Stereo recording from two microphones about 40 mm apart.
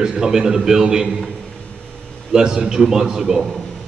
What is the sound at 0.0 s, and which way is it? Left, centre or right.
A man's voice, centre.